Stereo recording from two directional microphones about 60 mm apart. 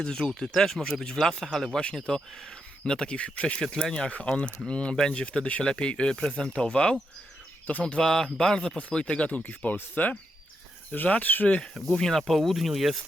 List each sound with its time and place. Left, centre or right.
0.0 s speech: centre
11.7 s speech: centre